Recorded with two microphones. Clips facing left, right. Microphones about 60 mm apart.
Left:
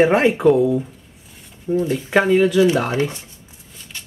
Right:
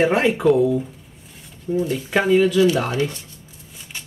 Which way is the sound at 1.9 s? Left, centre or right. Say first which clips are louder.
Left 2 dB; centre.